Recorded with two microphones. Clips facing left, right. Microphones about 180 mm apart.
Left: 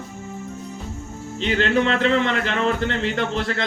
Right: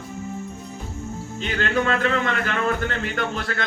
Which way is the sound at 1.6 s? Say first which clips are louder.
Left 2 dB; 25° left (ahead or behind).